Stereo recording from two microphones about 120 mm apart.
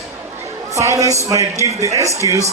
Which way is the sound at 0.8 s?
25° right (ahead or behind).